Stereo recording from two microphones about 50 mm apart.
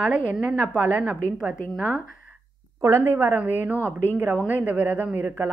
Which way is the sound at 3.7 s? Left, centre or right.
Left.